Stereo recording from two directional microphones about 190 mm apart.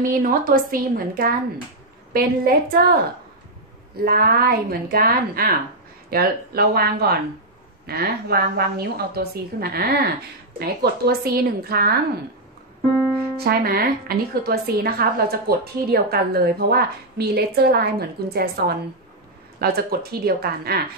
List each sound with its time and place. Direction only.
0.0 s a woman's voice: 45° right (ahead or behind)
13.4 s a woman's voice: 55° right (ahead or behind)
19.6 s a woman's voice: 55° right (ahead or behind)